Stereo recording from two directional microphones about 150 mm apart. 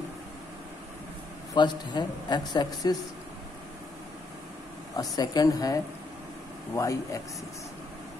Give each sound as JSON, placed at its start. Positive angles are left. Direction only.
{"t": 1.5, "sound": "a man's voice", "side_deg": 30}
{"t": 4.9, "sound": "a man's voice", "side_deg": 25}